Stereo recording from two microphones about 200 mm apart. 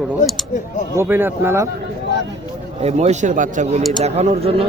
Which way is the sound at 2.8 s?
35° right (ahead or behind).